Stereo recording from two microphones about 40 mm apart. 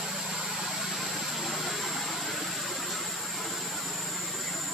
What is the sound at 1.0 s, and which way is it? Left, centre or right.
Vehicle, centre.